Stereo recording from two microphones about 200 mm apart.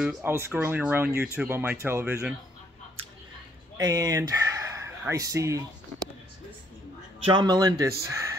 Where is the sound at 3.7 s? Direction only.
15° right (ahead or behind).